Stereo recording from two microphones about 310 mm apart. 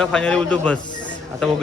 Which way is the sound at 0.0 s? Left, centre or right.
Centre.